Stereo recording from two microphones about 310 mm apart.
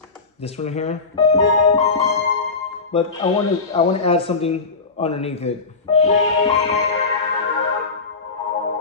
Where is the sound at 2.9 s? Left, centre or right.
Centre.